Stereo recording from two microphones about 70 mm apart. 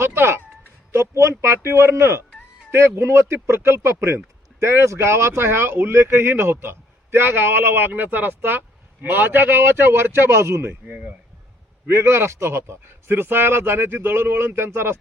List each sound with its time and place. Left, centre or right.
0.0 s speech: right
10.8 s speech: right
11.9 s speech: right